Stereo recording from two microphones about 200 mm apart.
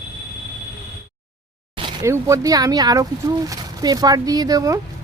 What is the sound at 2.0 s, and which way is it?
Speech, 15° right (ahead or behind).